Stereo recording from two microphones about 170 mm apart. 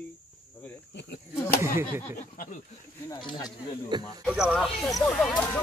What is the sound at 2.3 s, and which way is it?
Speech, 55° left (ahead or behind).